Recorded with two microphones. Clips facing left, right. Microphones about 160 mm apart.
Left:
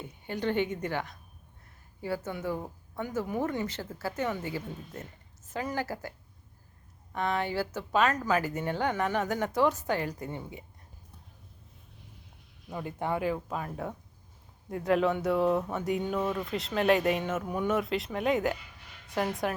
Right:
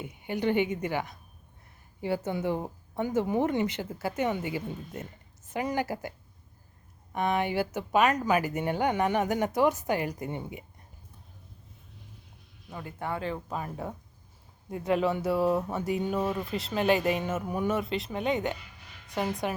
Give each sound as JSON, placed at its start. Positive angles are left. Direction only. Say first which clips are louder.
{"t": 0.0, "sound": "speech", "louder": "right 3 dB", "side_deg": -15}
{"t": 2.0, "sound": "speech", "louder": "right 4 dB", "side_deg": -25}
{"t": 12.8, "sound": "speech", "louder": "left 3 dB", "side_deg": 20}